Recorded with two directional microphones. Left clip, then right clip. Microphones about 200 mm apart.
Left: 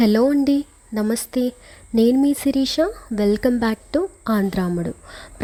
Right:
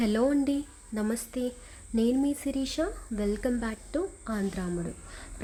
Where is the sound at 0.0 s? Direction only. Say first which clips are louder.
Left 9 dB; 35° left (ahead or behind).